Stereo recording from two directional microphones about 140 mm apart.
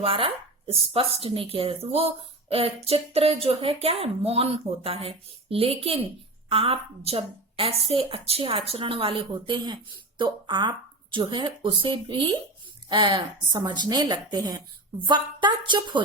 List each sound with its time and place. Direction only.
0.0 s a woman's voice: 40° right (ahead or behind)